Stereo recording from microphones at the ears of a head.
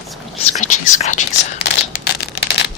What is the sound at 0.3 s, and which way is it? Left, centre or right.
Whispering, left.